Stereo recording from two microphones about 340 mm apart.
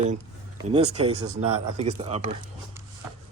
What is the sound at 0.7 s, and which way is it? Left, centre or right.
A man's voice, centre.